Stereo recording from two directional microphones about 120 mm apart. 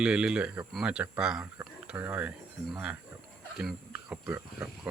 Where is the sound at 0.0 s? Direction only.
5° right (ahead or behind).